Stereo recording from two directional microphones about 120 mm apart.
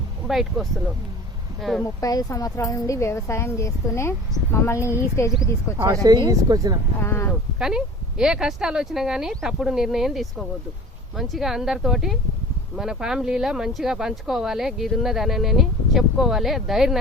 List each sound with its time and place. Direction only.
0.3 s speech: centre (ahead or behind)
1.8 s speech: 30° left (ahead or behind)
5.7 s speech: 20° right (ahead or behind)
6.1 s speech: 30° right (ahead or behind)
7.0 s speech: 20° left (ahead or behind)
7.6 s speech: 5° right (ahead or behind)